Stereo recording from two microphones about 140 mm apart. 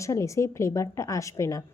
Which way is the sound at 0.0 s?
20° left (ahead or behind).